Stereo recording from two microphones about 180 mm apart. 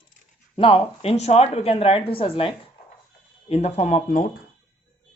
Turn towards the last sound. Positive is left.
turn(degrees=45)  # may be behind; listen again after turning